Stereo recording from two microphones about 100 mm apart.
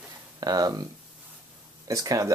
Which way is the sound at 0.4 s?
40° right (ahead or behind).